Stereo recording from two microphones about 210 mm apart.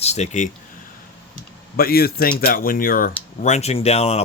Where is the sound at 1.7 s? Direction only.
45° left (ahead or behind).